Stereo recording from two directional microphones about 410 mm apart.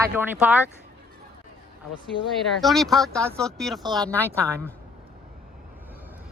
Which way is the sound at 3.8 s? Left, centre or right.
Centre.